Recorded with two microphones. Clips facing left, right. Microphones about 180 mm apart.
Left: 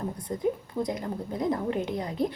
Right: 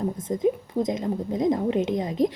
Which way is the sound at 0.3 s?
20° right (ahead or behind).